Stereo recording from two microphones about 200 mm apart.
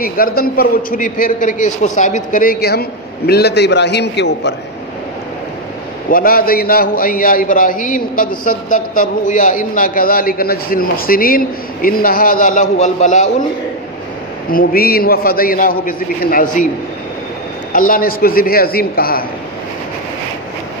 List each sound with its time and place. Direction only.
0.0 s a man's voice: 50° left (ahead or behind)
6.0 s a man's voice: 45° left (ahead or behind)
14.5 s a man's voice: 45° left (ahead or behind)
17.7 s a man's voice: 45° left (ahead or behind)